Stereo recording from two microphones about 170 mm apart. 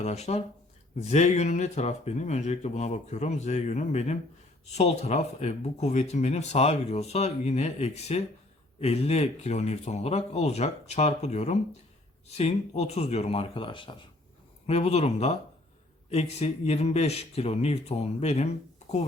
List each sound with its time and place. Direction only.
0.0 s speech: 40° left (ahead or behind)